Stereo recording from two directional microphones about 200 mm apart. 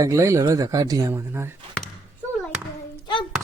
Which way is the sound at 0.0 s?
15° right (ahead or behind).